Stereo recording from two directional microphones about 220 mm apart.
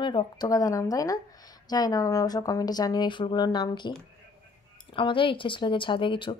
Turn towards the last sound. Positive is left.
turn(degrees=20)  # may be behind; listen again after turning